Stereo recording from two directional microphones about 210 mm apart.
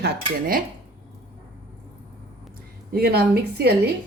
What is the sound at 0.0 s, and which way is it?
Speech, 45° right (ahead or behind).